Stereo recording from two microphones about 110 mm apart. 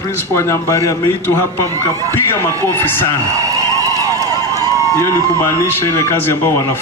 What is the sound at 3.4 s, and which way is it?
Police car, 30° right (ahead or behind).